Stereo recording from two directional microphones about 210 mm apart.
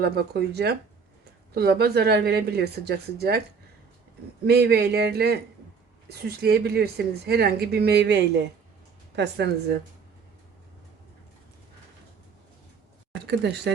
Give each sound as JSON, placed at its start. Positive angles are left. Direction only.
{"t": 0.0, "sound": "a woman's voice", "side_deg": -50}
{"t": 4.4, "sound": "a woman's voice", "side_deg": -50}